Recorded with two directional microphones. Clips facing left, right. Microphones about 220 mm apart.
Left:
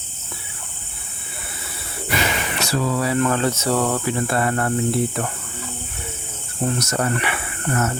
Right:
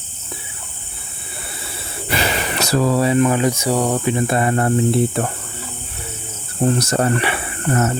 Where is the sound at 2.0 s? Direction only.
35° right (ahead or behind).